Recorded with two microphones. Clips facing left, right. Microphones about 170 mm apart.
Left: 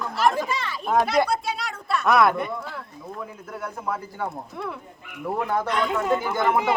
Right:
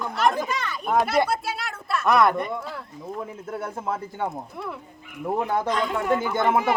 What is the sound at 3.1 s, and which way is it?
Speech, 25° right (ahead or behind).